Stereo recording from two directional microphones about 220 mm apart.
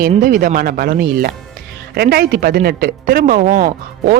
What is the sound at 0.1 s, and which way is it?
Speech, 40° right (ahead or behind).